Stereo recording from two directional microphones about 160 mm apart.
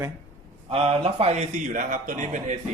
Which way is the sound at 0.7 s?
40° right (ahead or behind).